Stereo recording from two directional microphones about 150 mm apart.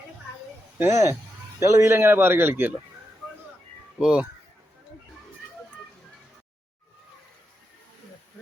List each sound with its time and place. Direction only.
0.8 s a man's voice: 20° right (ahead or behind)
3.9 s speech: 5° right (ahead or behind)